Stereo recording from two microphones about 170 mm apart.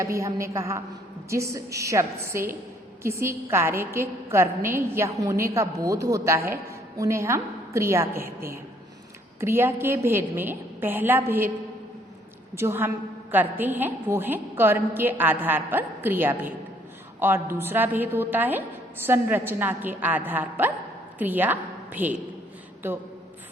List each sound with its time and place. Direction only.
0.0 s a woman's voice: 20° right (ahead or behind)
12.5 s a woman's voice: 15° right (ahead or behind)